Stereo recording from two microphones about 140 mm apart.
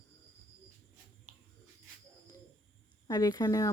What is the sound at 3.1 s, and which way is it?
Speech, 25° left (ahead or behind).